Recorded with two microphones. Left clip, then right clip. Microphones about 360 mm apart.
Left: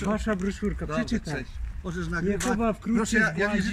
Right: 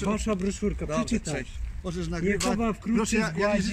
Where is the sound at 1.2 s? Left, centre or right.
Centre.